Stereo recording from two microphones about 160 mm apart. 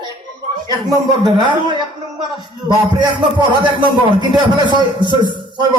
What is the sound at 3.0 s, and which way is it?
A man's voice, 30° right (ahead or behind).